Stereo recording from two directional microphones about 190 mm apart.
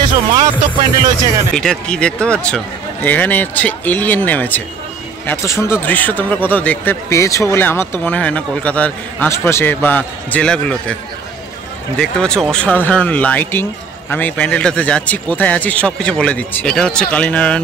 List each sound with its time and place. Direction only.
0.3 s speech: 20° right (ahead or behind)
1.5 s a man's voice: 5° left (ahead or behind)
12.0 s a man's voice: 5° left (ahead or behind)